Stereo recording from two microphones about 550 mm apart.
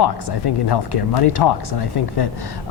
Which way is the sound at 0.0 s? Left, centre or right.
Left.